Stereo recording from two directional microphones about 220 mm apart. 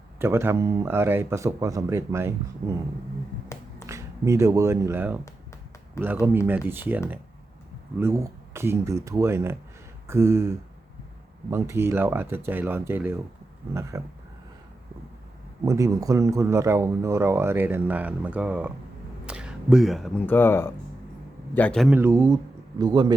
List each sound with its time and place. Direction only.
0.2 s speech: 10° right (ahead or behind)
3.8 s speech: 15° right (ahead or behind)
6.0 s speech: 10° left (ahead or behind)
6.5 s speech: 10° right (ahead or behind)
15.6 s speech: 15° right (ahead or behind)